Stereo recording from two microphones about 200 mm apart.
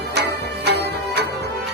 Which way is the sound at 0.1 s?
55° right (ahead or behind).